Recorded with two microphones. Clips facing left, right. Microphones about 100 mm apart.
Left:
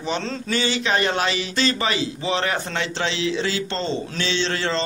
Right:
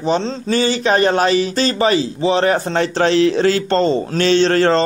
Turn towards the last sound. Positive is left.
turn(degrees=-50)  # may be behind; listen again after turning